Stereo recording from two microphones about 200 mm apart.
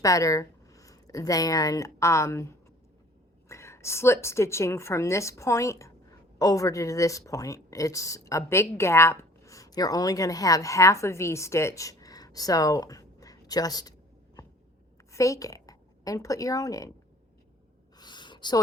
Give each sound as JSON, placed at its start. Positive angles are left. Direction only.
{"t": 0.0, "sound": "speech", "side_deg": 15}
{"t": 3.5, "sound": "a woman's voice", "side_deg": 15}
{"t": 15.1, "sound": "a woman's voice", "side_deg": 15}
{"t": 17.9, "sound": "a sound", "side_deg": 20}